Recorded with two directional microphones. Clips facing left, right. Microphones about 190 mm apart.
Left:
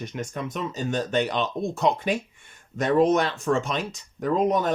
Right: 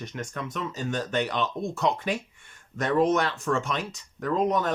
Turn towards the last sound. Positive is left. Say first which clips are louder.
# left 3 dB
turn(degrees=15)  # may be behind; listen again after turning